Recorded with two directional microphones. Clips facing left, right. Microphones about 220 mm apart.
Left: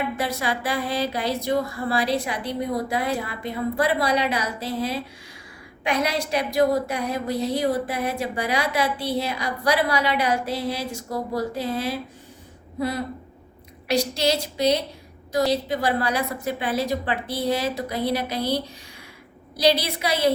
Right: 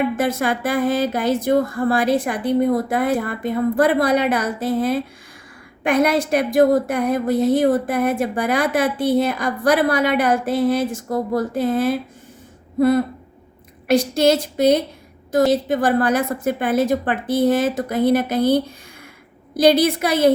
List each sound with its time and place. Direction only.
0.2 s a woman's voice: 50° right (ahead or behind)
13.8 s a woman's voice: 50° right (ahead or behind)